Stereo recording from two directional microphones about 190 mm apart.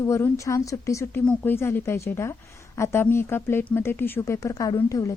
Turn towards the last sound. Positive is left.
turn(degrees=15)  # may be behind; listen again after turning